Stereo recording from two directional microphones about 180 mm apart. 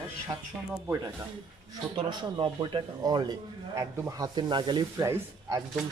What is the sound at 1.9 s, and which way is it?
Speech, 30° right (ahead or behind).